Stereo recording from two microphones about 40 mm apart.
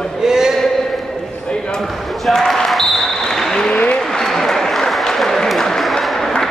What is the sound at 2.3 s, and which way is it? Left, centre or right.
Basketball bounce, centre.